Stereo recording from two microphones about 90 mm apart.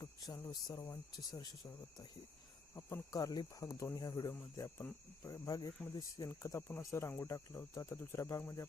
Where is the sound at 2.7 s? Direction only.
30° left (ahead or behind).